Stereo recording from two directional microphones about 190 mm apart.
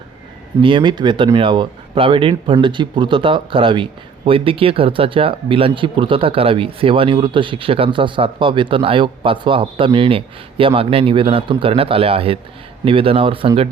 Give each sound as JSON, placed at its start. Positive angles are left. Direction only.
{"t": 0.6, "sound": "speech", "side_deg": -25}